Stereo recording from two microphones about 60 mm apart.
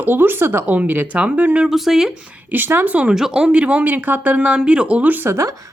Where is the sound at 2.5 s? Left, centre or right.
Right.